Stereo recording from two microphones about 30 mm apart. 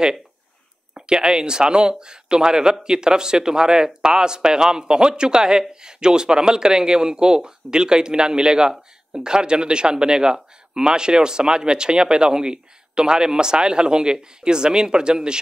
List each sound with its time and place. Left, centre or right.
0.9 s speech: right